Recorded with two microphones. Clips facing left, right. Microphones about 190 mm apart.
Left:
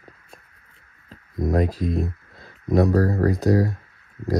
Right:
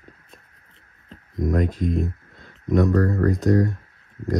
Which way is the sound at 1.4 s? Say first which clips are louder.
Left 1 dB; 35° left (ahead or behind).